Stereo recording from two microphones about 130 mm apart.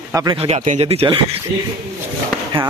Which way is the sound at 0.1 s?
25° right (ahead or behind).